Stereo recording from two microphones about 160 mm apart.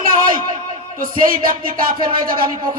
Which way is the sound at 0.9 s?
60° right (ahead or behind).